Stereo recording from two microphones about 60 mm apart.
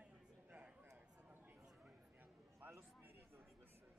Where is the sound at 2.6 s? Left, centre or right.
Right.